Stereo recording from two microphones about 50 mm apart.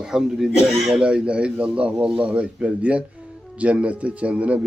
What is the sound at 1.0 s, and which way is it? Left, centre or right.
A man's voice, right.